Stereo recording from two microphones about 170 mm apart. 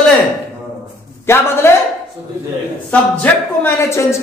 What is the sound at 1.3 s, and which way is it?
Speech, 15° left (ahead or behind).